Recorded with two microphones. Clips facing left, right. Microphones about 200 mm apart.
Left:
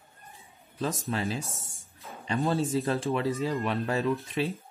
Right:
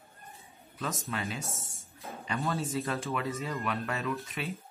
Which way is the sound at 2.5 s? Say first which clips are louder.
Left 6 dB; 30° left (ahead or behind).